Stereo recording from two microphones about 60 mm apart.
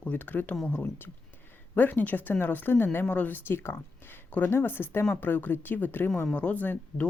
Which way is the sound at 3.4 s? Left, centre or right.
Left.